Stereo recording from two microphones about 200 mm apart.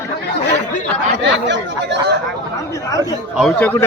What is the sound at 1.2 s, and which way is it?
Speech, 60° right (ahead or behind).